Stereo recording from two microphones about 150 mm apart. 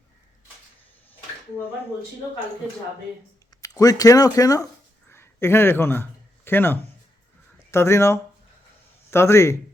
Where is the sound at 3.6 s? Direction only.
25° left (ahead or behind).